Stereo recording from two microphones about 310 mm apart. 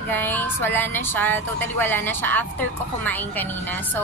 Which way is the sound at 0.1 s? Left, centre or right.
Centre.